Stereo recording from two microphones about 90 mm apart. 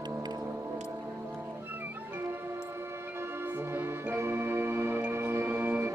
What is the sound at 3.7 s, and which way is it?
Music, 25° right (ahead or behind).